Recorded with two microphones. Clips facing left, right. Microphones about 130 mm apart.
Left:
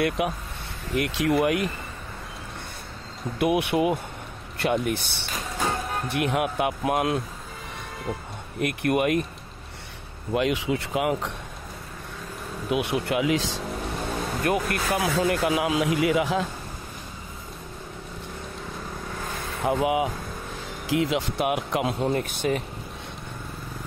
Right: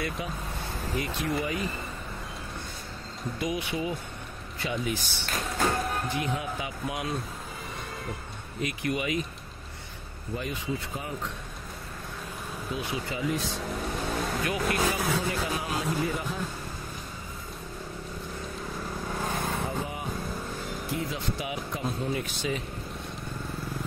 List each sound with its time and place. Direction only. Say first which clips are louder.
0.2 s speech: left 7 dB; 70° left (ahead or behind)
3.3 s speech: left 9 dB; 65° left (ahead or behind)
8.5 s speech: left 7 dB; 60° left (ahead or behind)
10.3 s speech: left 9 dB; 90° left
12.6 s speech: left 9 dB; 70° left (ahead or behind); by 13.6 s 90° left
14.4 s speech: left 7 dB; 55° left (ahead or behind)
15.0 s speech: left 6 dB; 70° left (ahead or behind); by 16.4 s 90° left
19.6 s speech: left 10 dB; 80° left
22.1 s speech: left 6 dB; 55° left (ahead or behind)